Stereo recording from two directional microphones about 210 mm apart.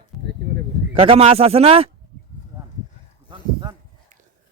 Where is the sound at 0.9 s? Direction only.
25° right (ahead or behind).